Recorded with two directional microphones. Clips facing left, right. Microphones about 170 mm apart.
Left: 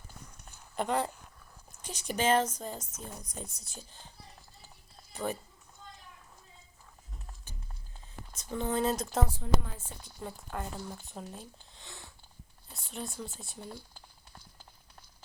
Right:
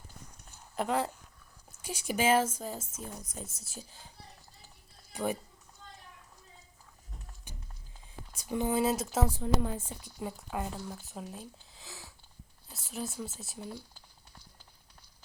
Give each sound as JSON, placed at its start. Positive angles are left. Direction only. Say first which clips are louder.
{"t": 0.8, "sound": "speech", "louder": "even", "side_deg": 0}
{"t": 5.1, "sound": "speech", "louder": "right 2 dB", "side_deg": -10}
{"t": 8.3, "sound": "speech", "louder": "right 2 dB", "side_deg": -10}
{"t": 9.4, "sound": "a woman's voice", "louder": "right 1 dB", "side_deg": -25}
{"t": 10.2, "sound": "speech", "louder": "right 3 dB", "side_deg": -5}